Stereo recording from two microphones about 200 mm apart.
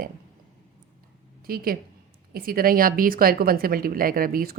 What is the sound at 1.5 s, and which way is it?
A woman's voice, 50° right (ahead or behind).